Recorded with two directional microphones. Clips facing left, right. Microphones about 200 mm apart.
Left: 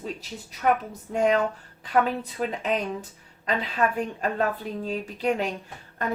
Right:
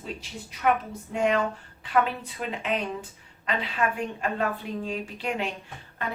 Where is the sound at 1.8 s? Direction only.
40° left (ahead or behind).